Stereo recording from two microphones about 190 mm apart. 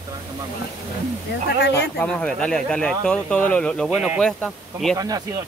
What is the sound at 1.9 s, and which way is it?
Speech, 5° left (ahead or behind).